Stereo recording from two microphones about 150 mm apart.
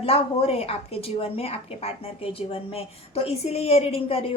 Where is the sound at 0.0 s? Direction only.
40° left (ahead or behind).